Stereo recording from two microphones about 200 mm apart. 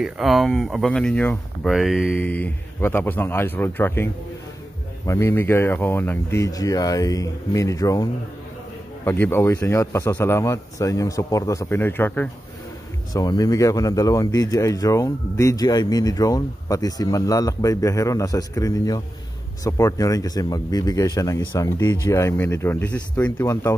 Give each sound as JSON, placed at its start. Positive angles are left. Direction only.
{"t": 0.0, "sound": "speech", "side_deg": 0}